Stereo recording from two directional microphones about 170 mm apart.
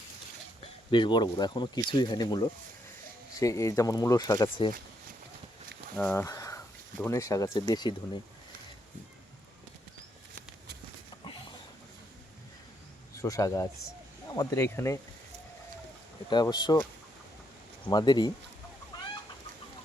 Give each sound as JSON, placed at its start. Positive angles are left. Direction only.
{"t": 0.6, "sound": "speech", "side_deg": 30}
{"t": 6.0, "sound": "speech", "side_deg": 10}
{"t": 13.1, "sound": "speech", "side_deg": 20}
{"t": 16.3, "sound": "speech", "side_deg": 25}
{"t": 17.9, "sound": "speech", "side_deg": 25}